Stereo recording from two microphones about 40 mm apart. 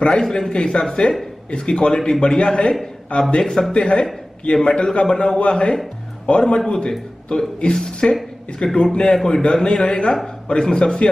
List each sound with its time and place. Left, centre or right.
0.2 s a man's voice: centre